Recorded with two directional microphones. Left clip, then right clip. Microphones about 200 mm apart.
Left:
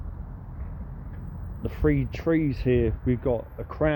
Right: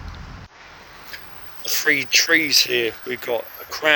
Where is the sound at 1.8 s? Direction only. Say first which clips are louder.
Right 8 dB; 5° right (ahead or behind).